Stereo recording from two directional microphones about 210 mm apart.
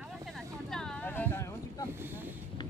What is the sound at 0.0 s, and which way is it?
Vehicle, centre (ahead or behind).